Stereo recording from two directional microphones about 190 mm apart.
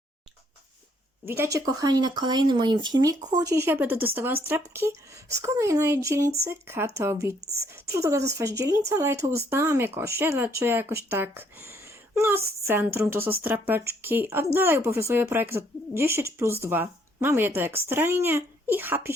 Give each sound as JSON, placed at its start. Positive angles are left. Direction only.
{"t": 1.2, "sound": "speech", "side_deg": -10}